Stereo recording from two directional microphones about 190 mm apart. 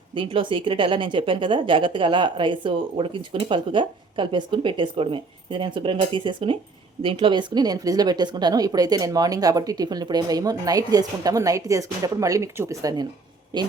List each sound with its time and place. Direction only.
0.1 s speech: 25° right (ahead or behind)